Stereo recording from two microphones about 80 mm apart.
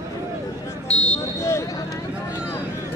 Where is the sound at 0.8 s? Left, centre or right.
Centre.